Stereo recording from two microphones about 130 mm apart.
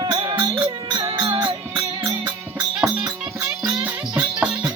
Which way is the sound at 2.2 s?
10° right (ahead or behind).